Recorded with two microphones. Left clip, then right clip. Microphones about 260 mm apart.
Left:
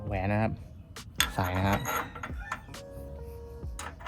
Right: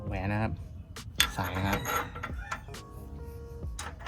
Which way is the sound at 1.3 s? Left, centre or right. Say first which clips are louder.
Left 3 dB; left.